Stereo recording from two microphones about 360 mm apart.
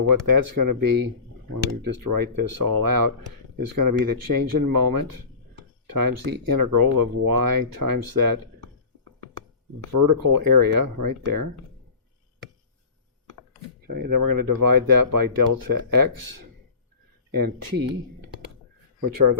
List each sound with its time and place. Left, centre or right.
0.0 s speech: right
9.9 s speech: right
13.8 s speech: right
18.9 s speech: right